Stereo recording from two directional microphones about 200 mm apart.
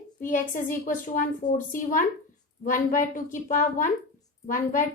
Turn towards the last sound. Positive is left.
turn(degrees=40)  # may be behind; listen again after turning